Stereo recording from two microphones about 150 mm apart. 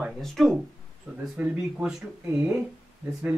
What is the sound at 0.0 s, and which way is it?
Speech, centre (ahead or behind).